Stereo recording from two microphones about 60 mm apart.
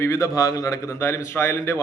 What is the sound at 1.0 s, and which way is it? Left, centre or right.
Speech, left.